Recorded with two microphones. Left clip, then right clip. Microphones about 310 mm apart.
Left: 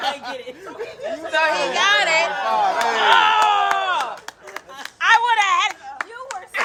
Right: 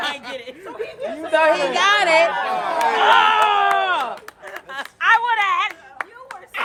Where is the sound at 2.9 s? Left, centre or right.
Centre.